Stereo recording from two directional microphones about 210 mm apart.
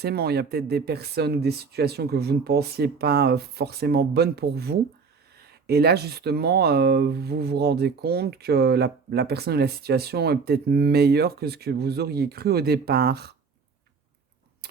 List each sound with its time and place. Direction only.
0.0 s speech: 50° right (ahead or behind)
14.6 s keys jangling: 50° right (ahead or behind)